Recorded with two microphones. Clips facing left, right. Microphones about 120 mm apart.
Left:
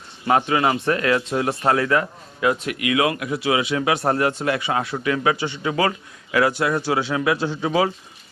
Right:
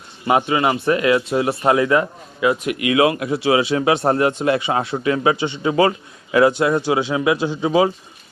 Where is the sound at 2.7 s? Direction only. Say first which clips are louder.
Right 4 dB; 25° right (ahead or behind).